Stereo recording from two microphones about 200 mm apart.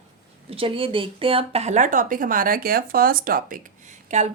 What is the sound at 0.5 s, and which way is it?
A woman's voice, 25° right (ahead or behind).